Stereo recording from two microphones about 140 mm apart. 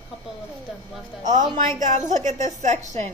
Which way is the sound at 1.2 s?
65° right (ahead or behind).